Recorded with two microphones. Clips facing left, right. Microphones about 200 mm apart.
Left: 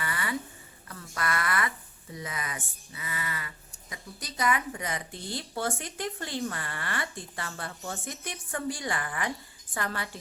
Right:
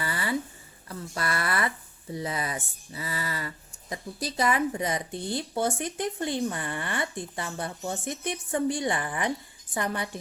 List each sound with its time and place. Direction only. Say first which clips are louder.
0.0 s a sound: right 3 dB; 30° right (ahead or behind)
0.9 s speech: right 2 dB; 30° right (ahead or behind)
5.1 s speech: right 6 dB; 55° right (ahead or behind)
5.4 s speech: right 4 dB; 20° right (ahead or behind)